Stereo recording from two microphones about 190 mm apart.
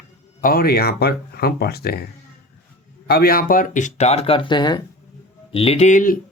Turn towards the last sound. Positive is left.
turn(degrees=40)  # may be behind; listen again after turning